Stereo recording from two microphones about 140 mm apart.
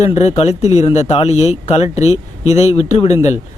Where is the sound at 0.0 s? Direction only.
50° left (ahead or behind).